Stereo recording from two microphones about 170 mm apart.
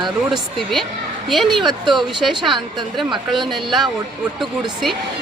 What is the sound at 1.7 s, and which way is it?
Speech, 25° right (ahead or behind).